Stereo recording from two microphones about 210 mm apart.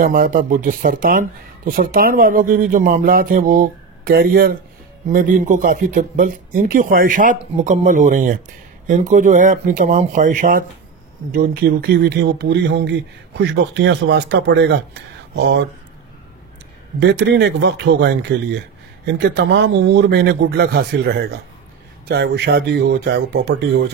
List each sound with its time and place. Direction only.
0.0 s speech: 45° right (ahead or behind)
17.0 s speech: 55° right (ahead or behind)
19.1 s speech: 55° right (ahead or behind)